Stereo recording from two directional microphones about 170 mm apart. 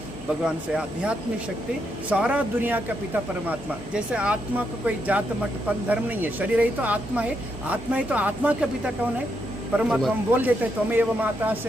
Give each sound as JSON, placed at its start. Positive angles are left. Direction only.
{"t": 0.4, "sound": "speech", "side_deg": -5}
{"t": 3.9, "sound": "speech", "side_deg": -5}